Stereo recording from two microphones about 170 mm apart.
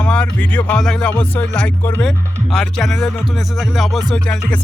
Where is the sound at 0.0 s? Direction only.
5° left (ahead or behind).